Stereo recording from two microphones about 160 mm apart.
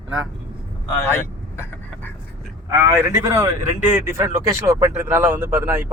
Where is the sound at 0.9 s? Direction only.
15° left (ahead or behind).